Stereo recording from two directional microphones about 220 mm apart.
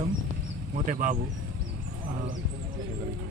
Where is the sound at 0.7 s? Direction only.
35° right (ahead or behind).